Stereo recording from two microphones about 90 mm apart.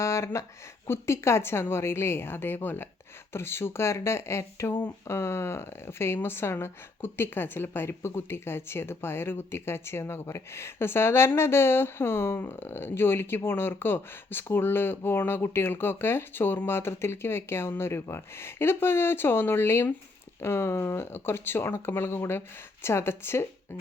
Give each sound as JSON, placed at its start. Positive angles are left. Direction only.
{"t": 0.0, "sound": "speech", "side_deg": 30}